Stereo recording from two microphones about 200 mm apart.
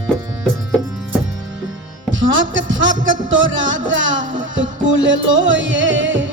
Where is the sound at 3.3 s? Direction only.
70° right (ahead or behind).